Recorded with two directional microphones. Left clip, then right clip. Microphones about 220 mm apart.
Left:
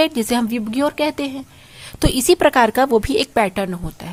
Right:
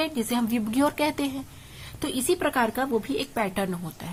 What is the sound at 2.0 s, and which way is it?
A woman's voice, 40° left (ahead or behind).